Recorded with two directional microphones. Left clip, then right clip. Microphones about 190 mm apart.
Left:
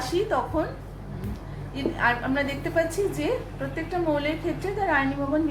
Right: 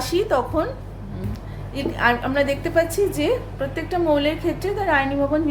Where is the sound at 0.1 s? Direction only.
60° right (ahead or behind).